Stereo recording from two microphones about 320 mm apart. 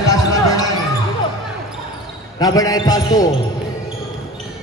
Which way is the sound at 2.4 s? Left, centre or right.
Centre.